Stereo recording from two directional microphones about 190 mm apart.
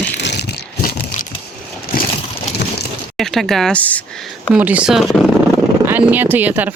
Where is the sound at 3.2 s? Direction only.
Centre (ahead or behind).